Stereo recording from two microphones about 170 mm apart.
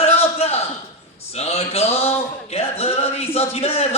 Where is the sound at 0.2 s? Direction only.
35° left (ahead or behind).